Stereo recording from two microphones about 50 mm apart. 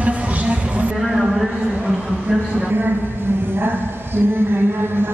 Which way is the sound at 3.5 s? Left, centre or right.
Right.